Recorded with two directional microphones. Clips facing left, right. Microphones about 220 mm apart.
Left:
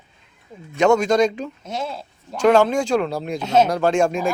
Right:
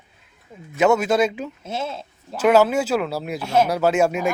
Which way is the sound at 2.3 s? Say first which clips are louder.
Left 1 dB; 5° right (ahead or behind).